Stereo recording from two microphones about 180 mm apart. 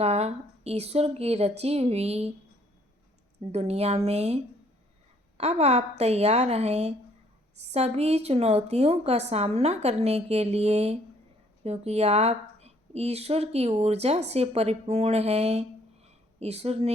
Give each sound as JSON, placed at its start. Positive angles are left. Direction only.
{"t": 0.0, "sound": "a woman's voice", "side_deg": -35}
{"t": 3.5, "sound": "a woman's voice", "side_deg": -35}
{"t": 5.4, "sound": "a woman's voice", "side_deg": -35}
{"t": 16.0, "sound": "a sound", "side_deg": -35}